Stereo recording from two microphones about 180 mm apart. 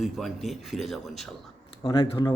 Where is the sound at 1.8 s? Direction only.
30° left (ahead or behind).